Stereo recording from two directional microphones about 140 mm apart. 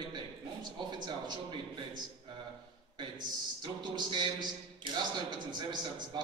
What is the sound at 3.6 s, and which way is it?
A man's voice, 35° right (ahead or behind).